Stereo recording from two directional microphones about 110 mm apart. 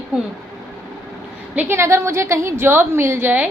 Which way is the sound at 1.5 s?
20° right (ahead or behind).